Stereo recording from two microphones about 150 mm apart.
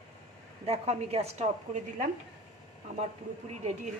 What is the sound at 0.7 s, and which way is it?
A woman's voice, 45° right (ahead or behind).